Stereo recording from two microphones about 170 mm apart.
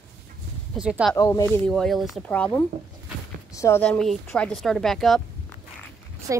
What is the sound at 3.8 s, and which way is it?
A woman's voice, 5° left (ahead or behind).